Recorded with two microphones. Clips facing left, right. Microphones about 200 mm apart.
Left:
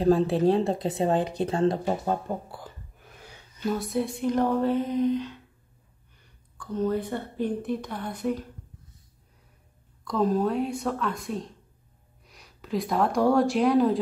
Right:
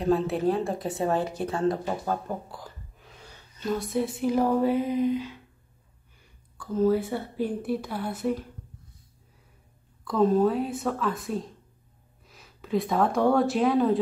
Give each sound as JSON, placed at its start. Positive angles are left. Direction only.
{"t": 0.0, "sound": "a woman's voice", "side_deg": 30}
{"t": 2.6, "sound": "a sound", "side_deg": 5}
{"t": 3.7, "sound": "a woman's voice", "side_deg": 0}
{"t": 6.6, "sound": "a woman's voice", "side_deg": -5}
{"t": 10.0, "sound": "speech", "side_deg": 0}